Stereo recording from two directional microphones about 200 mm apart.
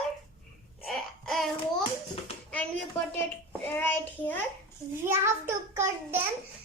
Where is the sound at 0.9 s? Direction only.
Centre (ahead or behind).